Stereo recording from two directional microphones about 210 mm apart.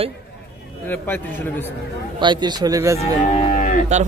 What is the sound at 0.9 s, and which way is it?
Speech, 10° left (ahead or behind).